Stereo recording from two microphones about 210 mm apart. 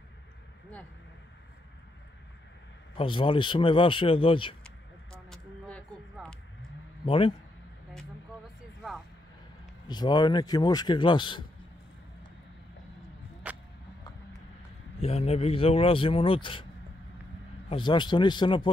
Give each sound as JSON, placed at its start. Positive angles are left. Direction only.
{"t": 3.0, "sound": "speech", "side_deg": 25}
{"t": 4.6, "sound": "a sound", "side_deg": 5}
{"t": 7.1, "sound": "speech", "side_deg": 25}
{"t": 9.8, "sound": "speech", "side_deg": 20}
{"t": 13.4, "sound": "vehicle", "side_deg": -5}
{"t": 15.0, "sound": "speech", "side_deg": 30}
{"t": 17.6, "sound": "speech", "side_deg": 20}